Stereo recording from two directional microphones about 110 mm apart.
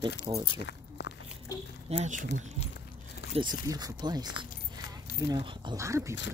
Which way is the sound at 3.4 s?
35° right (ahead or behind).